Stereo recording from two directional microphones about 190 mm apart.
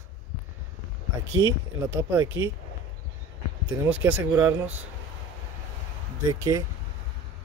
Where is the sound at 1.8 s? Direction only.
15° right (ahead or behind).